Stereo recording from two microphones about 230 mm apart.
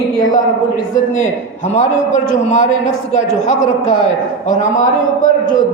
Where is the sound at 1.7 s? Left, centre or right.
Left.